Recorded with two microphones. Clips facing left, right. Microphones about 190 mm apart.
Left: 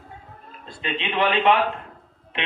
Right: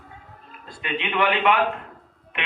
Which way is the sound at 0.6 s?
25° left (ahead or behind).